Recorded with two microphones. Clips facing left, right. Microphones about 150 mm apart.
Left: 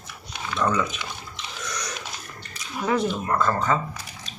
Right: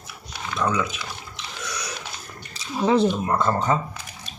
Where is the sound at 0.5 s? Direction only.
5° right (ahead or behind).